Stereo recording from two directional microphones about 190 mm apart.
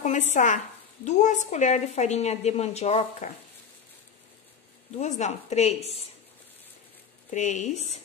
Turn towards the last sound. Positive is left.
turn(degrees=40)  # may be behind; listen again after turning